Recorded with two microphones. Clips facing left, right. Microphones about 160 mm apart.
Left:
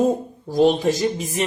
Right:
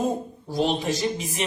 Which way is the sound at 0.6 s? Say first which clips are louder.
Left 7 dB; 45° left (ahead or behind).